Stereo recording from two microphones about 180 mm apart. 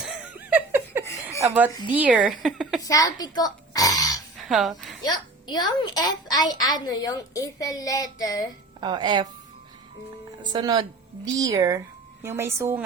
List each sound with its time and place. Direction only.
0.0 s a sound: 5° right (ahead or behind)
1.4 s speech: 15° right (ahead or behind)
2.8 s a child's voice: 20° left (ahead or behind)
4.4 s a sound: centre (ahead or behind)
5.0 s a child's voice: 25° left (ahead or behind)
8.8 s a woman's voice: 25° right (ahead or behind)
10.5 s a woman's voice: 25° right (ahead or behind)